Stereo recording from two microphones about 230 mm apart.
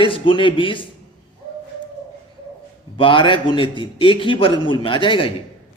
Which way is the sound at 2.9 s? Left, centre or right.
Left.